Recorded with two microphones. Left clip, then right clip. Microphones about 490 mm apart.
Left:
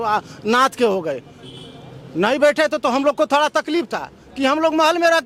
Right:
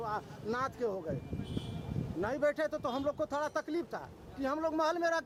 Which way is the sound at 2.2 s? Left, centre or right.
Left.